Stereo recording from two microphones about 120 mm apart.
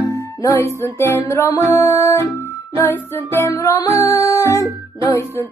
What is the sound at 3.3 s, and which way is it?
Music, 25° left (ahead or behind).